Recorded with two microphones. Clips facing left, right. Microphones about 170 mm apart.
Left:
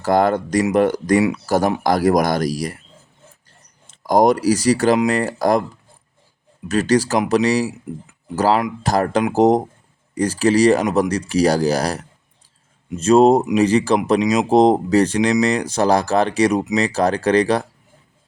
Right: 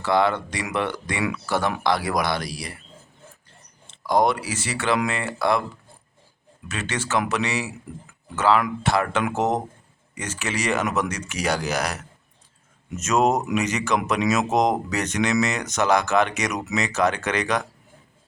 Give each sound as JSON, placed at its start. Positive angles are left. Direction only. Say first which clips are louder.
{"t": 0.0, "sound": "speech", "louder": "left 5 dB", "side_deg": 45}
{"t": 3.8, "sound": "speech", "louder": "left 6 dB", "side_deg": 45}
{"t": 6.7, "sound": "speech", "louder": "left 12 dB", "side_deg": 40}